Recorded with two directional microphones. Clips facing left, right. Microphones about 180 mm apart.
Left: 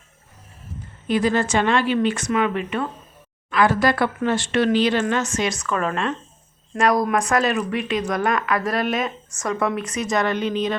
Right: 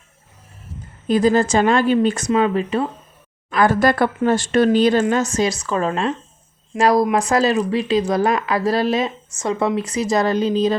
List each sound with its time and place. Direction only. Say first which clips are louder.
1.0 s a woman's voice: right 5 dB; 40° right (ahead or behind)
3.5 s a woman's voice: right 3 dB; 45° right (ahead or behind)